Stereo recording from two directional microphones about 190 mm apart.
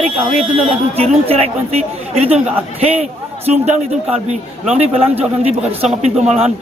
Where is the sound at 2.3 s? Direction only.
5° right (ahead or behind).